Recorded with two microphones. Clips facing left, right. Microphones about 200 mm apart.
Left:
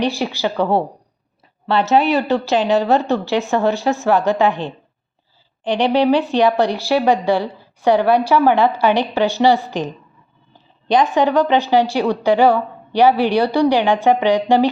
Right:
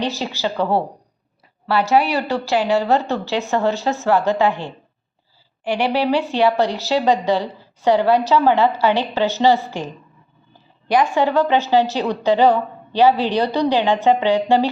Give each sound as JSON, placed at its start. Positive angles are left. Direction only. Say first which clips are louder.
{"t": 0.0, "sound": "a woman's voice", "louder": "left 3 dB", "side_deg": 15}
{"t": 1.6, "sound": "a woman's voice", "louder": "left 2 dB", "side_deg": 20}